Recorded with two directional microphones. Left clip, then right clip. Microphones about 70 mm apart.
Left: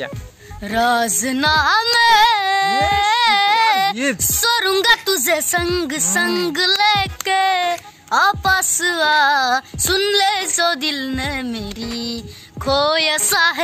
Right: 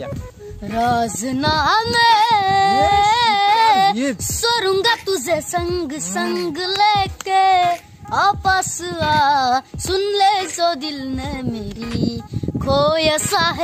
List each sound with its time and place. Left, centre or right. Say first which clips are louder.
0.7 s speech: left 2 dB; right
2.9 s baby cry: right 1 dB; right
3.9 s speech: left 1 dB; left
4.3 s speech: even; right
6.8 s music: even; right
12.6 s speech: even; right